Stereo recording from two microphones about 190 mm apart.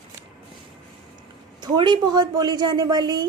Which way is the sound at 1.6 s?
25° right (ahead or behind).